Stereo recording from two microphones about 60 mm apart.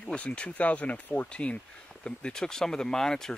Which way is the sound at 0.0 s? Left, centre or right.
Centre.